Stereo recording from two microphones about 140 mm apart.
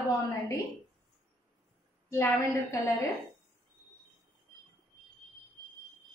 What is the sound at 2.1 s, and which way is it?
Speech, 20° left (ahead or behind).